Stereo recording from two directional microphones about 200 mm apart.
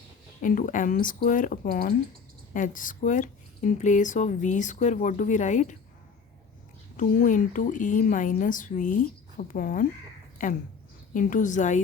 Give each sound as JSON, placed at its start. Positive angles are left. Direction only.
{"t": 0.4, "sound": "speech", "side_deg": 40}
{"t": 6.9, "sound": "speech", "side_deg": 40}